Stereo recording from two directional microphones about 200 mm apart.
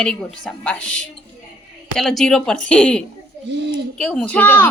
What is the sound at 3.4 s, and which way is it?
Speech, 60° right (ahead or behind).